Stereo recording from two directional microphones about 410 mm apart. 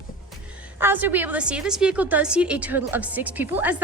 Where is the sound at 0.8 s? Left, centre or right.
Centre.